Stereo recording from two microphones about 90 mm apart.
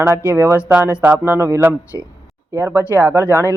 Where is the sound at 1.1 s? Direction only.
25° right (ahead or behind).